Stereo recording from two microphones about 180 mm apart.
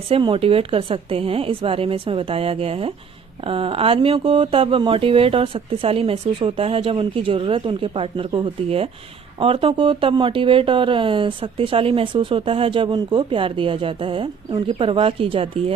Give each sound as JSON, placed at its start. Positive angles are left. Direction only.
{"t": 0.1, "sound": "speech", "side_deg": -30}